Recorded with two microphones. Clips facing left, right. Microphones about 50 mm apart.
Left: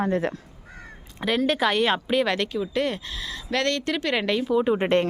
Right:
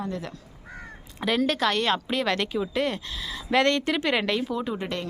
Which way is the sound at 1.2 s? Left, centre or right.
Centre.